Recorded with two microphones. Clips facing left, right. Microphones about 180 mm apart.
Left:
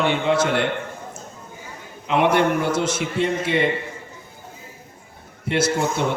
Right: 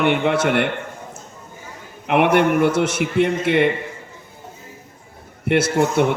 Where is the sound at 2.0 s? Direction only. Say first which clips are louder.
Right 3 dB; 60° right (ahead or behind).